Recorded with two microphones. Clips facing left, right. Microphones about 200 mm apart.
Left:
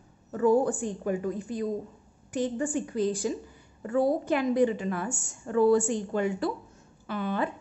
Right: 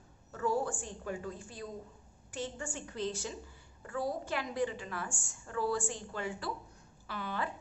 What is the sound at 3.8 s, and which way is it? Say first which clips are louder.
A woman's voice: left 11 dB; 25° left (ahead or behind).